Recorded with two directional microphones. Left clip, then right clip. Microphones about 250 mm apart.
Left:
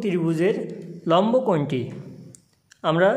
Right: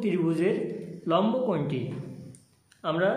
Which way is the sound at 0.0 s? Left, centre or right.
Left.